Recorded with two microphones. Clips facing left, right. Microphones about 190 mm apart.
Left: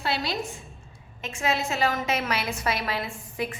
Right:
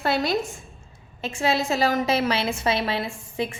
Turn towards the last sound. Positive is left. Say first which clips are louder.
# right 3 dB
turn(degrees=-30)  # may be behind; listen again after turning